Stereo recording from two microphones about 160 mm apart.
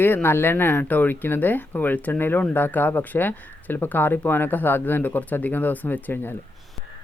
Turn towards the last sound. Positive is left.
turn(degrees=15)  # may be behind; listen again after turning